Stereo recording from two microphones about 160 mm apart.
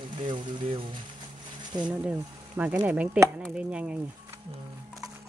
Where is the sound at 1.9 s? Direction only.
10° right (ahead or behind).